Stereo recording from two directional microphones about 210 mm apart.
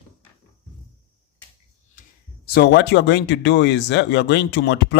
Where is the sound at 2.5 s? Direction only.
50° left (ahead or behind).